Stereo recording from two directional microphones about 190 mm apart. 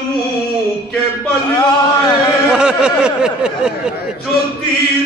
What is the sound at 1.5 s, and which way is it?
Speech, 25° left (ahead or behind).